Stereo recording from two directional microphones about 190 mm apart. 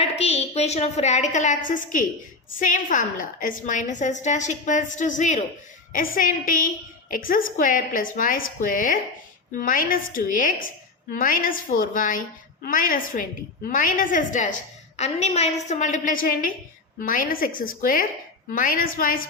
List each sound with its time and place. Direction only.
0.0 s a woman's voice: 35° left (ahead or behind)